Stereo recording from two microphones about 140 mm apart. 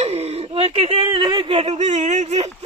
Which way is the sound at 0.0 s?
45° right (ahead or behind).